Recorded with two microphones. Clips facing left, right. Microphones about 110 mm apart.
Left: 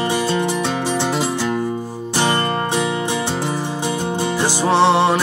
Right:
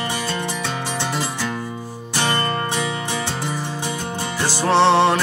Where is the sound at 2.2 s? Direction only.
20° left (ahead or behind).